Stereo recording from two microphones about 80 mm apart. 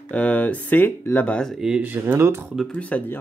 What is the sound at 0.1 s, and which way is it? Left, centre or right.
Speech, centre.